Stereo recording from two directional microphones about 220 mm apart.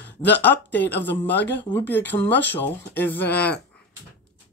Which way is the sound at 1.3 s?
50° left (ahead or behind).